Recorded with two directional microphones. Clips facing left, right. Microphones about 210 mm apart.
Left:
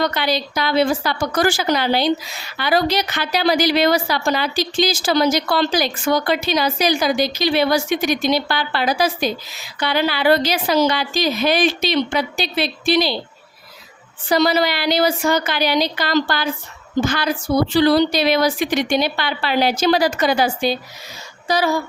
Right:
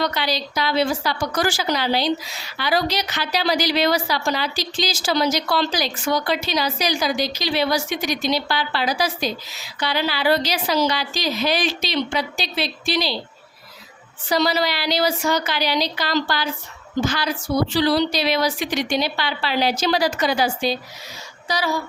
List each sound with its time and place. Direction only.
0.0 s a woman's voice: 55° left (ahead or behind)
14.3 s a woman's voice: 50° left (ahead or behind)